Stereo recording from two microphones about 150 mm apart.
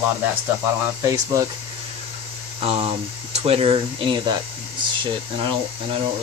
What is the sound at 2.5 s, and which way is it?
Speech, 45° right (ahead or behind).